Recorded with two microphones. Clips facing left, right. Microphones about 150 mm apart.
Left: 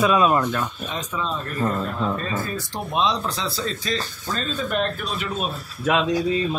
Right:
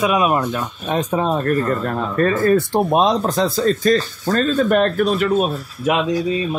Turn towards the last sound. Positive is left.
turn(degrees=-50)  # may be behind; listen again after turning